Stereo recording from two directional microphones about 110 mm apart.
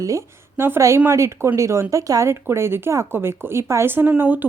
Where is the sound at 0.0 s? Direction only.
25° right (ahead or behind).